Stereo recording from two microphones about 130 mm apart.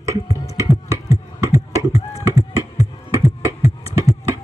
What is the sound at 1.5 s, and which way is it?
Computer keyboard, 25° right (ahead or behind).